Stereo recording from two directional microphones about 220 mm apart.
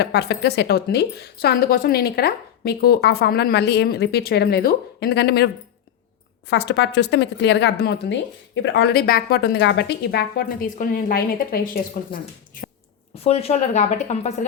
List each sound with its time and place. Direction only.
0.0 s a woman's voice: 50° left (ahead or behind)
6.5 s a woman's voice: 55° left (ahead or behind)
13.2 s speech: 30° left (ahead or behind)